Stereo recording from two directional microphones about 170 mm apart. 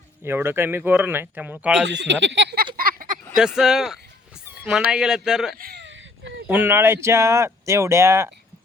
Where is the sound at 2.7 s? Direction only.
55° right (ahead or behind).